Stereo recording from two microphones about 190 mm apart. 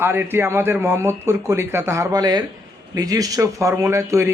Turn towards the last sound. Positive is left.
turn(degrees=-15)  # may be behind; listen again after turning